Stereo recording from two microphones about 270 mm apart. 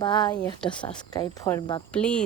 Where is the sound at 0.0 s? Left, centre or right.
Centre.